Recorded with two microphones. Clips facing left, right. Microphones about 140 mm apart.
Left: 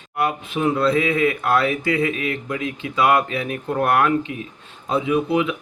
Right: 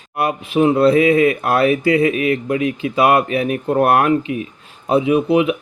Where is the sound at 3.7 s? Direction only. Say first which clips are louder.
Right 4 dB; 30° right (ahead or behind).